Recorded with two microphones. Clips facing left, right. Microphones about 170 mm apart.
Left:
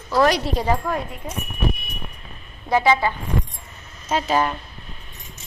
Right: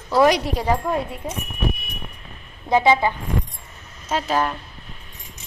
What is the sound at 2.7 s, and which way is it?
Speech, 20° right (ahead or behind).